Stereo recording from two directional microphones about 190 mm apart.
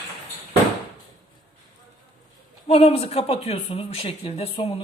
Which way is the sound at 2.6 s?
30° left (ahead or behind).